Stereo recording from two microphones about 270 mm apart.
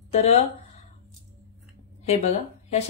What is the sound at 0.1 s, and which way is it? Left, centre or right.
Speech, left.